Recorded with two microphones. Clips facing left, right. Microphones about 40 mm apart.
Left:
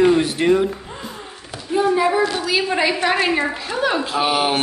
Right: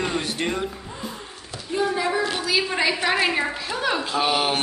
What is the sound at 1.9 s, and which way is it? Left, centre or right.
A woman's voice, centre.